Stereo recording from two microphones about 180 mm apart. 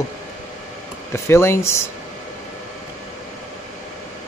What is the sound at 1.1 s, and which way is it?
Speech, 15° left (ahead or behind).